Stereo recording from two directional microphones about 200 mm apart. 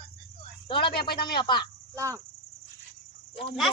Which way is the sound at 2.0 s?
15° right (ahead or behind).